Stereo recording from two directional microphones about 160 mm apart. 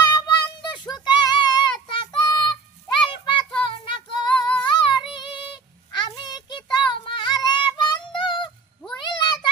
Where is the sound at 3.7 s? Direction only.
35° left (ahead or behind).